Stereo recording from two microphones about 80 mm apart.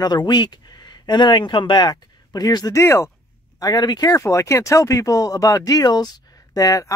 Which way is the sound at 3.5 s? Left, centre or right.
Left.